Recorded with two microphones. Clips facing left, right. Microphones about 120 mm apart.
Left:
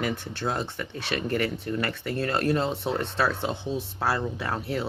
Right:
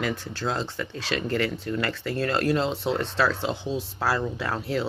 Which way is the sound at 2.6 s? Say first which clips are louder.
Right 2 dB; 30° right (ahead or behind).